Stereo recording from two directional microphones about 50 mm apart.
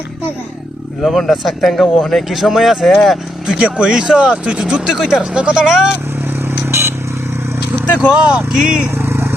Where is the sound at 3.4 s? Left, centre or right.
Centre.